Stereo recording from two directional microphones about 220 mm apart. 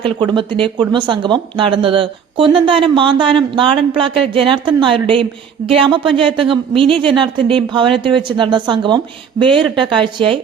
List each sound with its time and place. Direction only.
0.0 s speech: 20° right (ahead or behind)